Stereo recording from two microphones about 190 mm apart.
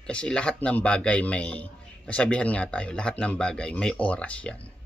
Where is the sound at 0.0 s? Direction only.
5° left (ahead or behind).